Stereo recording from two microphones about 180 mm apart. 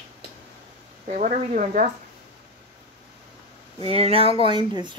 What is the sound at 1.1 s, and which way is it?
Speech, 45° right (ahead or behind).